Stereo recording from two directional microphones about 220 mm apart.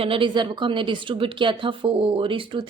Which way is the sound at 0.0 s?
25° right (ahead or behind).